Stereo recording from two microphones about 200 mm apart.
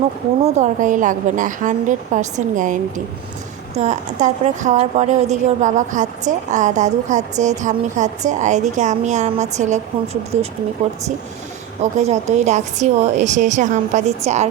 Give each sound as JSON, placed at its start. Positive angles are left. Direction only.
{"t": 0.4, "sound": "a woman's voice", "side_deg": -35}
{"t": 3.8, "sound": "a woman's voice", "side_deg": -35}
{"t": 11.8, "sound": "a woman's voice", "side_deg": -35}